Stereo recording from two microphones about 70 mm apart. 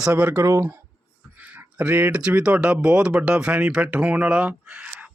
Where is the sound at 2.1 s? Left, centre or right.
Centre.